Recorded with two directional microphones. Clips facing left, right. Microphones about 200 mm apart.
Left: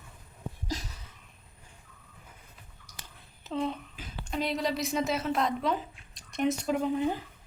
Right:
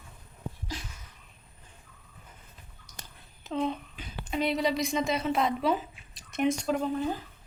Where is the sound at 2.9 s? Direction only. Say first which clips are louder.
Right 2 dB; 10° left (ahead or behind).